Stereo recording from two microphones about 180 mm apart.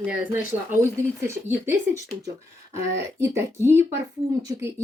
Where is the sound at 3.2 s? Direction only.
15° right (ahead or behind).